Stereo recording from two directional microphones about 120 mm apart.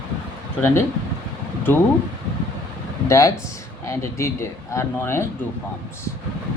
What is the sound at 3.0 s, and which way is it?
Speech, 25° left (ahead or behind).